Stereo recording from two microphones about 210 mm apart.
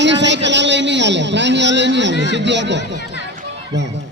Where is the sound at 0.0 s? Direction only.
55° right (ahead or behind).